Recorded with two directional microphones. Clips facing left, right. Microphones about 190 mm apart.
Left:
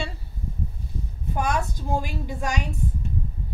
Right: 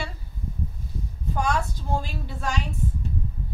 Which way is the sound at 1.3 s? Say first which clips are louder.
Even; 20° left (ahead or behind).